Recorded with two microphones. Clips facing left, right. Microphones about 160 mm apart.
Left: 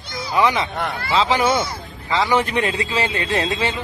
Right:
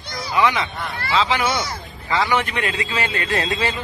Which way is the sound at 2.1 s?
20° left (ahead or behind).